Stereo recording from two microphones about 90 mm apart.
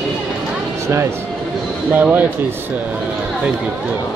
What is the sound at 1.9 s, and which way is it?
Speech, 20° right (ahead or behind).